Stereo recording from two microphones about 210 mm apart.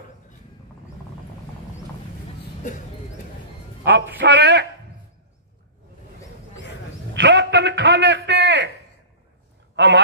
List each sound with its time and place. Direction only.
4.2 s a man's voice: 55° right (ahead or behind)
7.2 s a sound: 55° right (ahead or behind)
9.8 s a man's voice: 55° right (ahead or behind)